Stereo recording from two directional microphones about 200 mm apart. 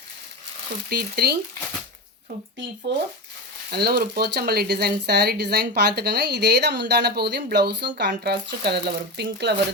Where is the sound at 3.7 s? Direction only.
50° right (ahead or behind).